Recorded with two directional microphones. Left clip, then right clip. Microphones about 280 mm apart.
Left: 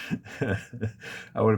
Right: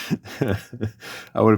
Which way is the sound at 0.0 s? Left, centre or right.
Right.